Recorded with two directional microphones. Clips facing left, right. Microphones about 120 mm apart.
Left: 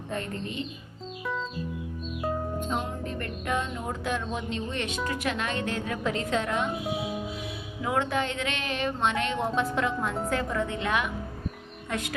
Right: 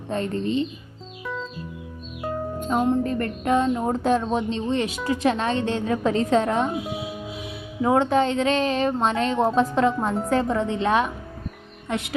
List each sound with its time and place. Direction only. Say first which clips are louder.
0.1 s a woman's voice: right 9 dB; 30° right (ahead or behind)
2.2 s music: right 1 dB; centre (ahead or behind)
2.6 s a woman's voice: right 10 dB; 45° right (ahead or behind)
7.8 s a woman's voice: right 8 dB; 35° right (ahead or behind)
11.9 s a woman's voice: right 4 dB; 20° right (ahead or behind)